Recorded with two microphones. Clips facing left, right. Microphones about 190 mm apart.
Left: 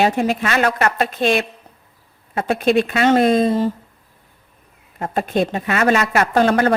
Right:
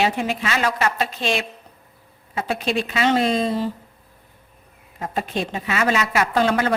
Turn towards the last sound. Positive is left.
turn(degrees=45)  # may be behind; listen again after turning